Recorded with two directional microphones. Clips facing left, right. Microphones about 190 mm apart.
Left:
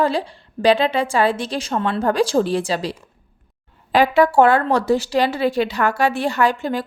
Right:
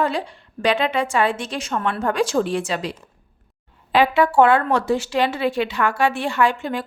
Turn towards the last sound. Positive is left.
turn(degrees=35)  # may be behind; listen again after turning